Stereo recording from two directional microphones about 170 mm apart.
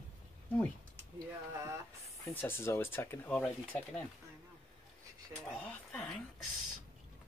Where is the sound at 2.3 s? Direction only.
15° left (ahead or behind).